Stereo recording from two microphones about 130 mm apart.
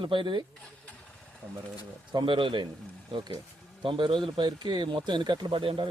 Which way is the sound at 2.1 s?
40° right (ahead or behind).